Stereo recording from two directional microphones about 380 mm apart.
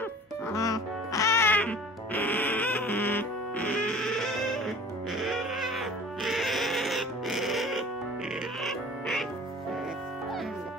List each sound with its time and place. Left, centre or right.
0.5 s music: centre